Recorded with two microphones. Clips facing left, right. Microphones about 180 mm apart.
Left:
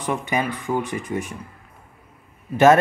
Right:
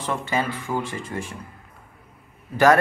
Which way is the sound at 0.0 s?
15° left (ahead or behind).